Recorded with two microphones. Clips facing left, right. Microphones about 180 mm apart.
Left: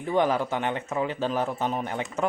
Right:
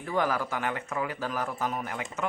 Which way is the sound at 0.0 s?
25° left (ahead or behind).